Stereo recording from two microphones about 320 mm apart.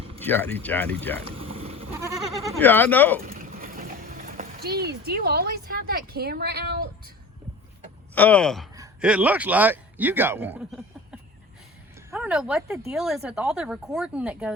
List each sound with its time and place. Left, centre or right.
0.2 s speech: centre
1.4 s sheep: centre
1.9 s goat: centre
2.6 s speech: centre
3.2 s speech: right
8.1 s speech: centre